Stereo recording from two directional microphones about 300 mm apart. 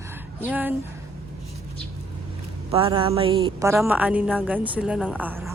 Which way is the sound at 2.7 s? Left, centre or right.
Centre.